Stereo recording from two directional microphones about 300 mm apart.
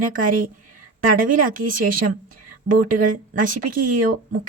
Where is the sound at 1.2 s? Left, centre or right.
Right.